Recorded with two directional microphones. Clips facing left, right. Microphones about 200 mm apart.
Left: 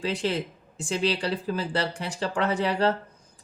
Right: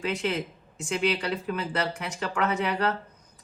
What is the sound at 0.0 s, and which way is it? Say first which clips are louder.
Speech: left 1 dB; 30° left (ahead or behind).